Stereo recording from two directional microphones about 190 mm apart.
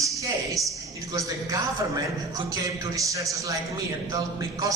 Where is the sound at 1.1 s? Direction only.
15° right (ahead or behind).